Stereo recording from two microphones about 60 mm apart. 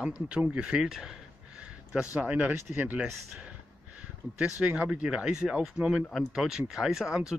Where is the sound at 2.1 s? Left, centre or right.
Right.